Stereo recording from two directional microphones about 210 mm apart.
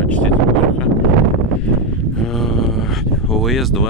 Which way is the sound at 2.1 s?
Centre (ahead or behind).